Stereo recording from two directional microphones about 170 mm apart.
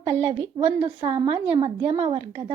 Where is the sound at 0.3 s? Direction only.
35° right (ahead or behind).